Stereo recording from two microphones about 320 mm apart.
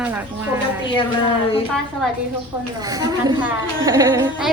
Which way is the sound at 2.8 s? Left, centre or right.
Centre.